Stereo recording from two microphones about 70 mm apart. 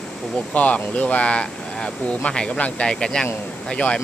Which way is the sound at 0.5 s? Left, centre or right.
Left.